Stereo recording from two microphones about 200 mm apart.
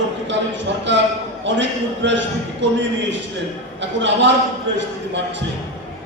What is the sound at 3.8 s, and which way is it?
A man's voice, 65° right (ahead or behind).